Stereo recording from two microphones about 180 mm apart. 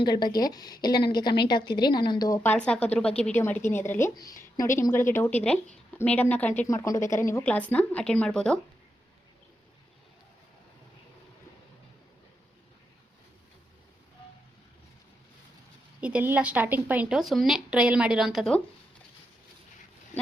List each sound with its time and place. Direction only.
0.0 s a woman's voice: 25° left (ahead or behind)
2.4 s a woman's voice: 5° left (ahead or behind)
16.0 s a woman's voice: 5° right (ahead or behind)